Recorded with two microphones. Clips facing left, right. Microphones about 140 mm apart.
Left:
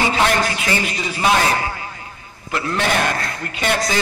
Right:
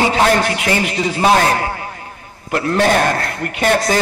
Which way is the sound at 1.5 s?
45° right (ahead or behind).